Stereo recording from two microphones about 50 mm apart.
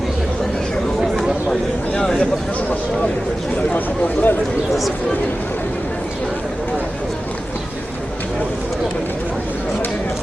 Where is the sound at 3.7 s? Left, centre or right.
Left.